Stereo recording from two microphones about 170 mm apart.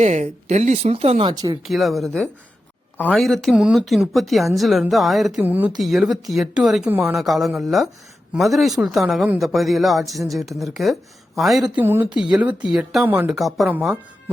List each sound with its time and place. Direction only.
0.0 s speech: 45° right (ahead or behind); by 1.5 s 25° right (ahead or behind)
1.6 s speech: centre (ahead or behind)